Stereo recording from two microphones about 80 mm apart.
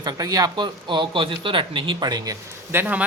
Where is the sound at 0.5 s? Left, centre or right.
Right.